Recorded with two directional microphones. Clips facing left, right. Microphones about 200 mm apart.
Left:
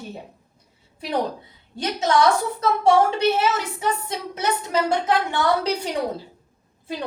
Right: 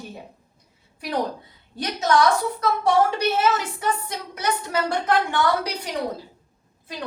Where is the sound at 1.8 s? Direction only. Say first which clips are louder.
Even; 25° left (ahead or behind).